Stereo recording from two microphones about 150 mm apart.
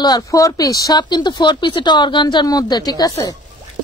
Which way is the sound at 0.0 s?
25° left (ahead or behind).